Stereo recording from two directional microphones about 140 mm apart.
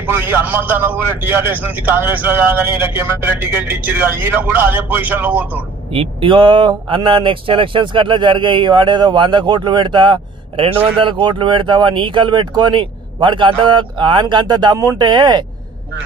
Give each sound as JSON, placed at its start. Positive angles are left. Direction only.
{"t": 0.0, "sound": "a man's voice", "side_deg": -15}
{"t": 5.9, "sound": "speech", "side_deg": -40}